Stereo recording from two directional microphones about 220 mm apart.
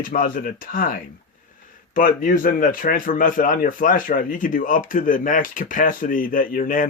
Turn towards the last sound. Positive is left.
turn(degrees=40)  # may be behind; listen again after turning